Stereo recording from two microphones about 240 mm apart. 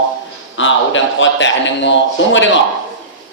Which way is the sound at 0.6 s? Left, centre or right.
Left.